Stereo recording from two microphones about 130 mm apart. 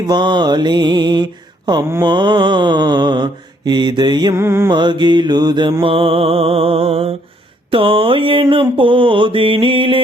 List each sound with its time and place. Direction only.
0.1 s mantra: 35° right (ahead or behind)
4.4 s music: 20° right (ahead or behind)
4.7 s mantra: 35° right (ahead or behind)
5.8 s music: 45° right (ahead or behind)
7.7 s mantra: 45° right (ahead or behind)